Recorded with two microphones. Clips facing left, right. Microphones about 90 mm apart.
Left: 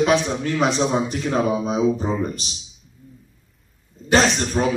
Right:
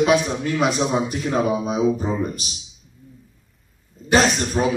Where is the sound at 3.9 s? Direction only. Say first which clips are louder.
Even; centre (ahead or behind).